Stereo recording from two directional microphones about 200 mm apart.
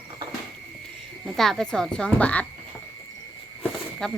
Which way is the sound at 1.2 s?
Centre (ahead or behind).